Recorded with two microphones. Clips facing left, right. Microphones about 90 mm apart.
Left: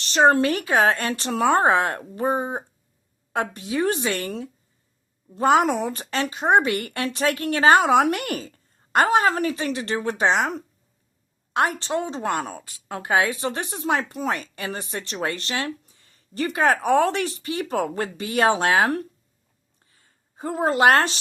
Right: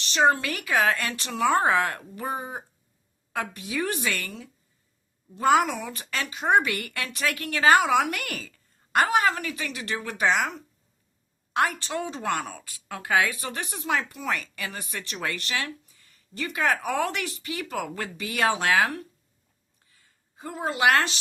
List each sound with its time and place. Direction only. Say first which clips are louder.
0.0 s speech: left 5 dB; 40° left (ahead or behind)
0.5 s a woman's voice: left 4 dB; 30° left (ahead or behind)
11.5 s a woman's voice: left 3 dB; 30° left (ahead or behind)
19.8 s a sound: left 2 dB; 35° left (ahead or behind)